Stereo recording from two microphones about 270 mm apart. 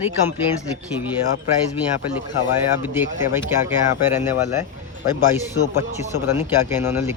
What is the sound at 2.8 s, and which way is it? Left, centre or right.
A man's voice, centre.